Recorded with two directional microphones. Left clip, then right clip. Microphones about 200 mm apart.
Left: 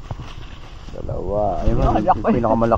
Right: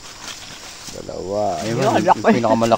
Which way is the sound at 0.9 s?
20° right (ahead or behind).